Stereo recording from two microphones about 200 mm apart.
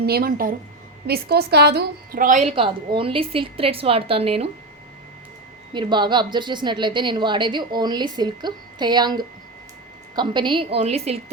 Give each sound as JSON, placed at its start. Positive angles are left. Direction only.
{"t": 0.0, "sound": "a woman's voice", "side_deg": -50}
{"t": 5.7, "sound": "a woman's voice", "side_deg": -25}